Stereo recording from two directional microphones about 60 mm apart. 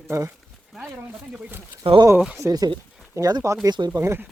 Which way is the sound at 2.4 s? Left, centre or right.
Right.